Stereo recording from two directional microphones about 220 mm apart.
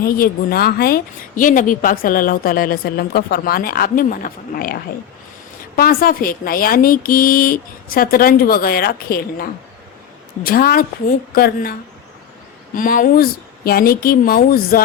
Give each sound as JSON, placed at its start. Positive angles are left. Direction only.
{"t": 0.0, "sound": "a woman's voice", "side_deg": 45}